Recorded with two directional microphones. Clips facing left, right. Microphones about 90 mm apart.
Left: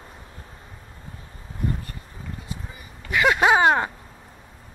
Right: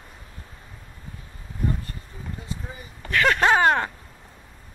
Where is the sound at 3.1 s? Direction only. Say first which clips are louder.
Left 1 dB; 10° left (ahead or behind).